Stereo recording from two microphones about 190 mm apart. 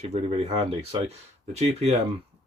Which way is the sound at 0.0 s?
35° right (ahead or behind).